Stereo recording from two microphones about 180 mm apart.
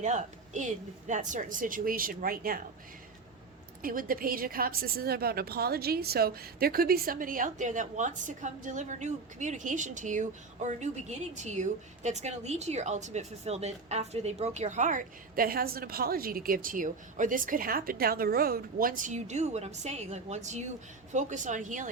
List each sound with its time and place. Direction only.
0.0 s a woman's voice: 40° right (ahead or behind)
3.8 s a woman's voice: 50° right (ahead or behind)